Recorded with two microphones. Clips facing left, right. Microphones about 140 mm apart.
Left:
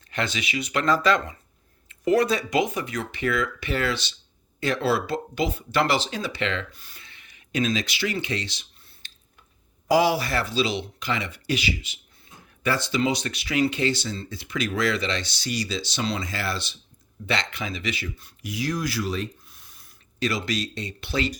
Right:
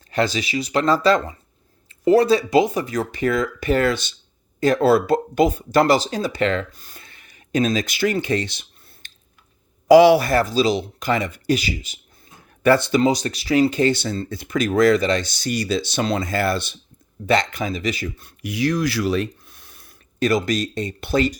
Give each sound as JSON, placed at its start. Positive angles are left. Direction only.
{"t": 0.1, "sound": "speech", "side_deg": -35}
{"t": 9.9, "sound": "speech", "side_deg": -70}
{"t": 10.2, "sound": "speech", "side_deg": -40}
{"t": 12.7, "sound": "speech", "side_deg": -55}
{"t": 13.0, "sound": "speech", "side_deg": -40}
{"t": 13.9, "sound": "speech", "side_deg": -55}